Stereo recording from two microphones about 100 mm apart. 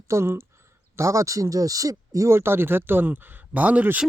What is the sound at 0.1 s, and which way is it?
Speech, 25° right (ahead or behind).